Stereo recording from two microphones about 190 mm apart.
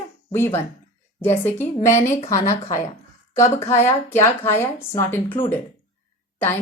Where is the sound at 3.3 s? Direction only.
15° left (ahead or behind).